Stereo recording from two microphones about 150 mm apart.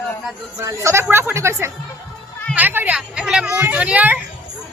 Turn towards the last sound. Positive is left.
turn(degrees=-10)  # may be behind; listen again after turning